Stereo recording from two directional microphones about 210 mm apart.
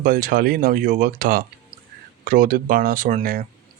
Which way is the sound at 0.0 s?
40° right (ahead or behind).